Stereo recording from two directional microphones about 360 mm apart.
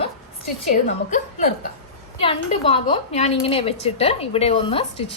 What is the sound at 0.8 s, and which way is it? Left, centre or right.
A woman's voice, centre.